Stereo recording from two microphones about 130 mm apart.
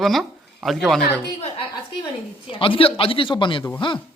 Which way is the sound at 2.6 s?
45° left (ahead or behind).